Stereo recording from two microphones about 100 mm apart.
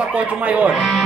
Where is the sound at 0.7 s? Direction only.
Centre (ahead or behind).